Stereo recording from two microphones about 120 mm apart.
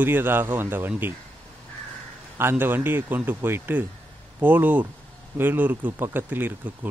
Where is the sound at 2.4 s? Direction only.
20° right (ahead or behind).